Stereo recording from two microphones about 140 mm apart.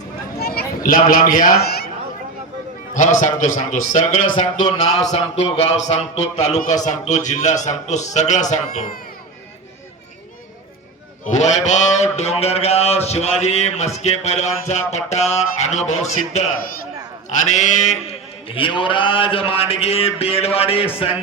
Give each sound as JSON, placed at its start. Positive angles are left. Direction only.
{"t": 0.4, "sound": "speech", "side_deg": 90}
{"t": 2.9, "sound": "a man's voice", "side_deg": 60}
{"t": 4.3, "sound": "a man's voice", "side_deg": 35}
{"t": 5.1, "sound": "a man's voice", "side_deg": 50}
{"t": 11.3, "sound": "a man's voice", "side_deg": 55}